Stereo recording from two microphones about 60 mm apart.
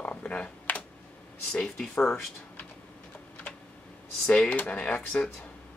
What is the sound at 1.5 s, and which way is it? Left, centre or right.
Speech, centre.